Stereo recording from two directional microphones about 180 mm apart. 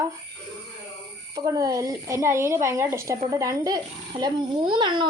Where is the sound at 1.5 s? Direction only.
20° right (ahead or behind).